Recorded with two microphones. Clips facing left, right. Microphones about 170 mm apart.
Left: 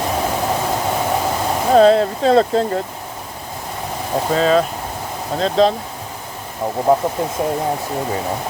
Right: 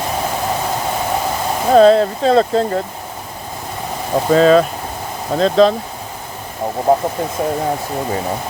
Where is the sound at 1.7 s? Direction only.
35° right (ahead or behind).